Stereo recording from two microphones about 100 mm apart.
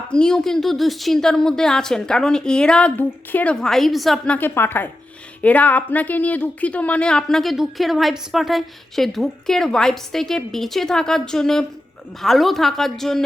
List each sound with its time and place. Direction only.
0.1 s a woman's voice: 10° left (ahead or behind)
3.5 s speech: 5° left (ahead or behind)
4.3 s a woman's voice: 20° left (ahead or behind); by 13.2 s 5° left (ahead or behind)